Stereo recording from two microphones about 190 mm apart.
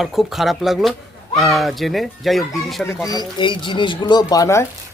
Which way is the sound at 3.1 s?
20° left (ahead or behind).